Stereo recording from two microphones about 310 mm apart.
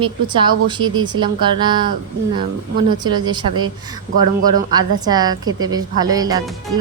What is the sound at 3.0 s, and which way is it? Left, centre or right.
Speech, centre.